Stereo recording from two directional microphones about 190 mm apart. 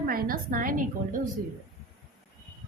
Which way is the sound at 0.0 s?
50° right (ahead or behind).